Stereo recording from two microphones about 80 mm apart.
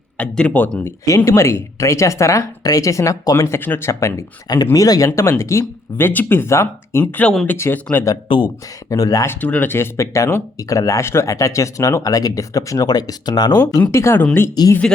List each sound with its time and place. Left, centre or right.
0.2 s speech: centre
1.0 s speech: left
4.4 s speech: left
7.0 s speech: centre
8.3 s speech: left
8.9 s speech: left
9.2 s speech: left
13.9 s speech: left
14.6 s speech: left